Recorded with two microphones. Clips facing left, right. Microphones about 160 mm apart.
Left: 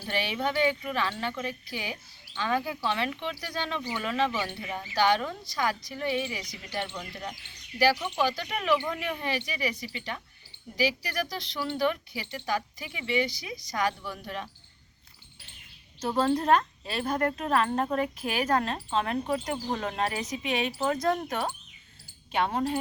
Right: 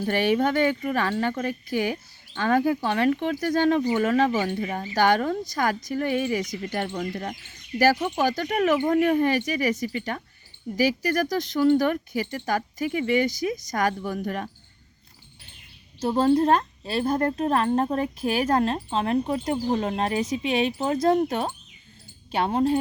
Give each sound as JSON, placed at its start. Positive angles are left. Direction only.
{"t": 0.0, "sound": "speech", "side_deg": -50}
{"t": 16.0, "sound": "a woman's voice", "side_deg": -30}